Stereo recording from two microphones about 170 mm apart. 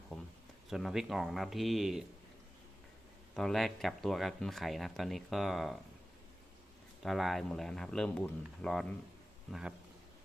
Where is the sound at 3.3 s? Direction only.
Centre (ahead or behind).